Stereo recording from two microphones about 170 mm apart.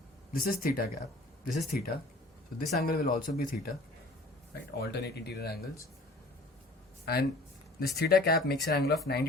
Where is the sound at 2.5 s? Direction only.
60° left (ahead or behind).